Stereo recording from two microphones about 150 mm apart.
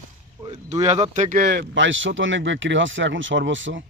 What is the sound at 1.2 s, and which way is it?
Speech, 65° right (ahead or behind).